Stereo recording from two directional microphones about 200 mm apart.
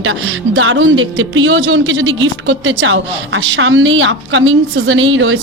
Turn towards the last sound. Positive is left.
turn(degrees=-75)  # may be behind; listen again after turning